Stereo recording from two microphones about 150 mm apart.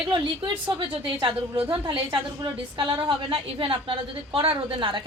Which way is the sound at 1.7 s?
30° right (ahead or behind).